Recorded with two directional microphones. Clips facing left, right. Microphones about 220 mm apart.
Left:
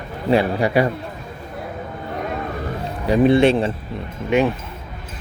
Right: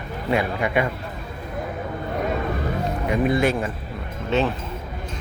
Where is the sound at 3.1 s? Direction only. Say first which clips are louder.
Left 7 dB; 30° left (ahead or behind).